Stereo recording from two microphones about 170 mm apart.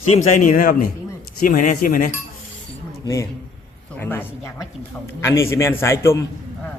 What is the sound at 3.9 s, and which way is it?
A man's voice, 10° left (ahead or behind).